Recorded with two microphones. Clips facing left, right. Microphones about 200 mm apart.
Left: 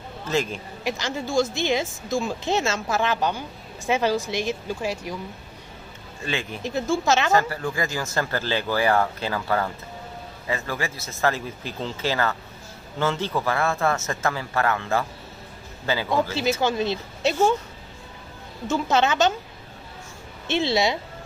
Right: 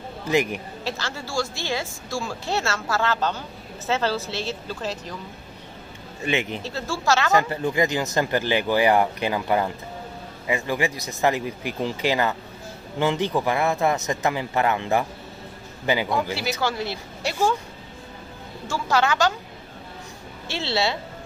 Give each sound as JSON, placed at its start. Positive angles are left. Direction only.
{"t": 0.3, "sound": "speech", "side_deg": -15}
{"t": 0.8, "sound": "speech", "side_deg": 15}
{"t": 6.2, "sound": "speech", "side_deg": -20}
{"t": 6.6, "sound": "speech", "side_deg": 15}
{"t": 7.3, "sound": "speech", "side_deg": -20}
{"t": 16.6, "sound": "speech", "side_deg": 20}
{"t": 18.7, "sound": "speech", "side_deg": 20}
{"t": 20.4, "sound": "speech", "side_deg": 15}